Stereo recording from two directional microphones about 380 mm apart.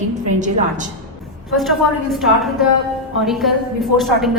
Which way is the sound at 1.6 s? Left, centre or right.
Centre.